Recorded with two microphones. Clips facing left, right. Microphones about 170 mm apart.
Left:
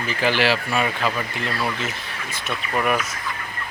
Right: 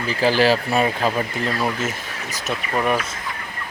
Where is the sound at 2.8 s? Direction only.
30° right (ahead or behind).